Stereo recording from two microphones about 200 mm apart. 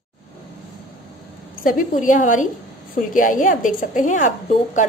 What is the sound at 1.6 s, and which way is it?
A woman's voice, 45° left (ahead or behind).